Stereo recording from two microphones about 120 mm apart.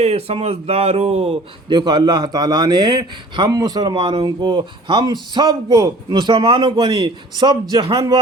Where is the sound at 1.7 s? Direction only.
35° right (ahead or behind).